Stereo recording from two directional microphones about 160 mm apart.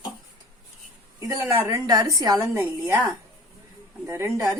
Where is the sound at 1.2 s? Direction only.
20° right (ahead or behind).